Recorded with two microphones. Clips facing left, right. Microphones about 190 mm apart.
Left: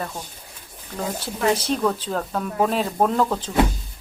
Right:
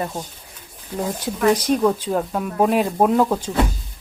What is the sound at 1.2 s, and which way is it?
Speech, 15° right (ahead or behind).